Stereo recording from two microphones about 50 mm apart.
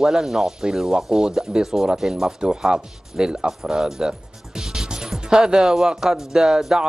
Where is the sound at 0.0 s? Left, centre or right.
Centre.